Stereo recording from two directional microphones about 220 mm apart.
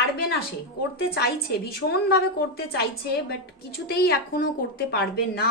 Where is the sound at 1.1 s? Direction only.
45° left (ahead or behind).